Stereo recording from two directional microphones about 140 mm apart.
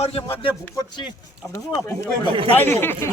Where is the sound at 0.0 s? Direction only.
40° left (ahead or behind).